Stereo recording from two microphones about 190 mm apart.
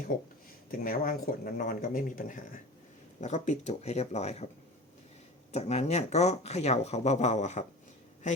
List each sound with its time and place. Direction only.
0.1 s speech: 45° left (ahead or behind)
5.5 s speech: 35° left (ahead or behind)